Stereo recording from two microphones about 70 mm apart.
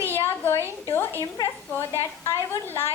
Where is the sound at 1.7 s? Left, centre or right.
Left.